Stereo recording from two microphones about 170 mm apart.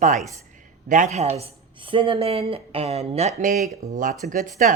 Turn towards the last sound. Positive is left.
turn(degrees=-50)  # may be behind; listen again after turning